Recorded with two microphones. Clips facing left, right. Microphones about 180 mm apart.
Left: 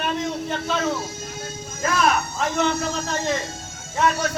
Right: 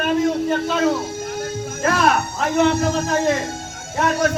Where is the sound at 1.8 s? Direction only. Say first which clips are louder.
Right 3 dB; 60° right (ahead or behind).